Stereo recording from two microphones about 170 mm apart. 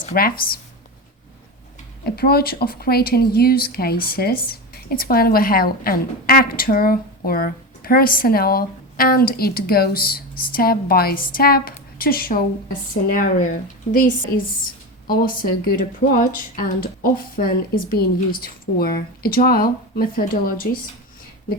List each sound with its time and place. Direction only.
0.0 s speech: 60° left (ahead or behind)
2.0 s speech: 65° left (ahead or behind)